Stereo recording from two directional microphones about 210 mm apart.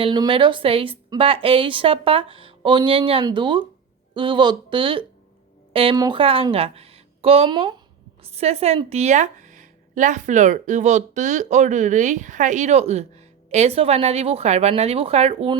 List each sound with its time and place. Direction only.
0.0 s a woman's voice: 25° right (ahead or behind)